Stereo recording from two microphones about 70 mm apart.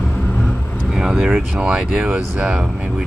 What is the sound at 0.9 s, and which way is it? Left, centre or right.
Speech, centre.